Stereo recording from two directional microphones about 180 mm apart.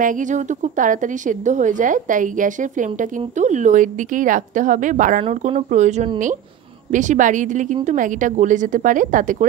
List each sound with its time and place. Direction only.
0.0 s a woman's voice: 45° right (ahead or behind)